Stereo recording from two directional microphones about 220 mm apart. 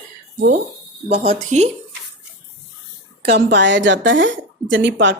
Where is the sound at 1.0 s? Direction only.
30° right (ahead or behind).